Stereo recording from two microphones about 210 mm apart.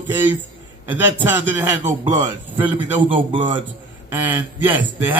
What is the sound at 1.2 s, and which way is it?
Speech, 10° right (ahead or behind).